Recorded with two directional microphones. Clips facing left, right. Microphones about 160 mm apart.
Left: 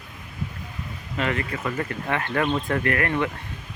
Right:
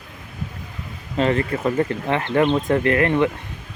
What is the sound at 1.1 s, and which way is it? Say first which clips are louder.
Speech: right 7 dB; 30° right (ahead or behind).